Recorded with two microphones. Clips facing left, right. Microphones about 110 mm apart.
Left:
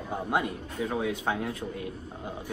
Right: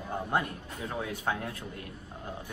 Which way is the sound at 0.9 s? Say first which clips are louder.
Left 3 dB; 20° left (ahead or behind).